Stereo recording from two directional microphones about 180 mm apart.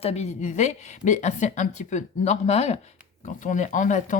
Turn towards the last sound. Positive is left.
turn(degrees=45)  # may be behind; listen again after turning